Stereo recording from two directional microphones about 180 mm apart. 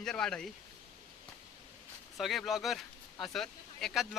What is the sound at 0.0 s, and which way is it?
Speech, 5° left (ahead or behind).